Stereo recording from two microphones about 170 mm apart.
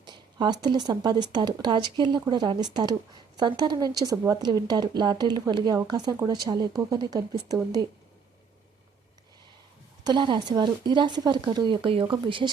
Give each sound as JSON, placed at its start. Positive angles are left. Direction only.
{"t": 0.0, "sound": "a woman's voice", "side_deg": -25}
{"t": 10.0, "sound": "a woman's voice", "side_deg": -25}